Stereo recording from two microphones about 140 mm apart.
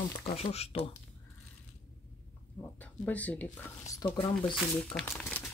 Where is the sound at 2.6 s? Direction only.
10° left (ahead or behind).